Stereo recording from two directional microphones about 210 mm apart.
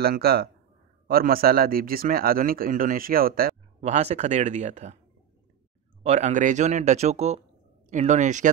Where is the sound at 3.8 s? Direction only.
30° right (ahead or behind).